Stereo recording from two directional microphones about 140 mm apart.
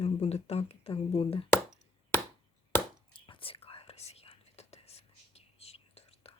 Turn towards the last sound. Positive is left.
turn(degrees=45)  # may be behind; listen again after turning